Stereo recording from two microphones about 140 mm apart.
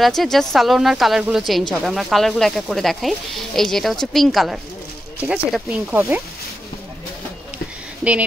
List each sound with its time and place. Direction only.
0.0 s speech: centre (ahead or behind)
8.0 s speech: 10° right (ahead or behind)